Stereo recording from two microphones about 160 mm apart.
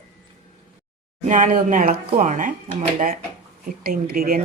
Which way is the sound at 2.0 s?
45° right (ahead or behind).